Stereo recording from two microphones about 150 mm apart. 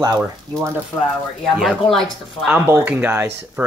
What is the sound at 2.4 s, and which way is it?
Speech, 10° right (ahead or behind).